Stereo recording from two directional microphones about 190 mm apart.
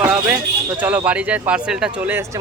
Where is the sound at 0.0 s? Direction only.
5° right (ahead or behind).